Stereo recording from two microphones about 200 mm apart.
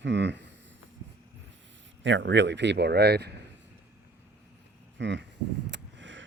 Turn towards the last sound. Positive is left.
turn(degrees=-70)  # may be behind; listen again after turning